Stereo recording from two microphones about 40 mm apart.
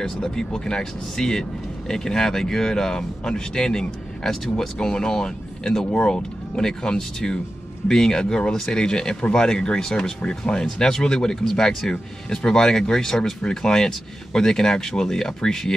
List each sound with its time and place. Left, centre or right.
0.0 s speech: centre